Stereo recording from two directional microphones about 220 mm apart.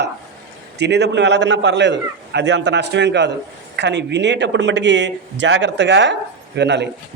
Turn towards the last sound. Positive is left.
turn(degrees=-50)  # may be behind; listen again after turning